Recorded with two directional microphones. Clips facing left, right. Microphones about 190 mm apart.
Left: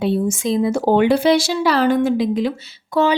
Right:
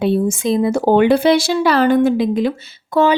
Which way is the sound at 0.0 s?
55° right (ahead or behind).